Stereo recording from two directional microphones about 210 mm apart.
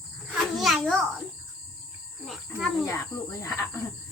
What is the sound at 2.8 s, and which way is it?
Speech, 15° left (ahead or behind).